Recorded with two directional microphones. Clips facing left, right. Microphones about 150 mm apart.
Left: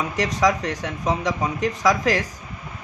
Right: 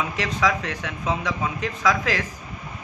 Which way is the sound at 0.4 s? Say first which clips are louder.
Left 3 dB; 40° left (ahead or behind).